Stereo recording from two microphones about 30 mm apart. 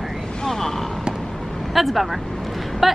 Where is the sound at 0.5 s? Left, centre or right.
Centre.